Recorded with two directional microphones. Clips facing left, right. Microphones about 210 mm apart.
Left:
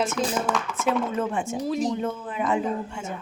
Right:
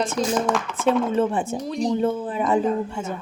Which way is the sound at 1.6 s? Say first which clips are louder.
Even; centre (ahead or behind).